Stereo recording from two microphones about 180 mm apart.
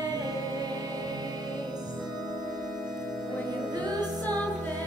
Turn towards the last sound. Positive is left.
turn(degrees=-20)  # may be behind; listen again after turning